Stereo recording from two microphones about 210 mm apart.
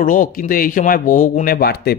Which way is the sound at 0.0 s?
40° left (ahead or behind).